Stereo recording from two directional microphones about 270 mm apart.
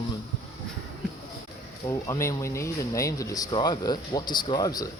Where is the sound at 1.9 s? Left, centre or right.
Centre.